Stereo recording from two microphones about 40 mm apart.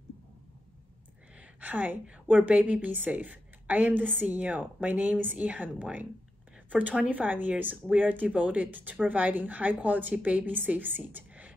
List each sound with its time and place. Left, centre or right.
1.6 s a woman's voice: right